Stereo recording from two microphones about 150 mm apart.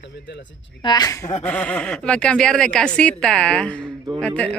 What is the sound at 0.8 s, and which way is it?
Speech, 25° left (ahead or behind).